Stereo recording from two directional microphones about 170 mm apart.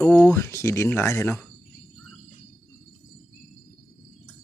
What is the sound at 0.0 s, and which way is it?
Speech, 5° left (ahead or behind).